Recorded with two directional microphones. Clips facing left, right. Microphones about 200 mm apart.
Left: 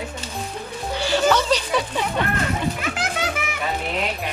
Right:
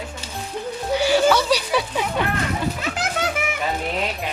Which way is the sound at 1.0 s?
10° right (ahead or behind).